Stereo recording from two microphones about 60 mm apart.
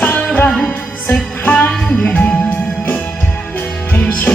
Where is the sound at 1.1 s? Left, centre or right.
Left.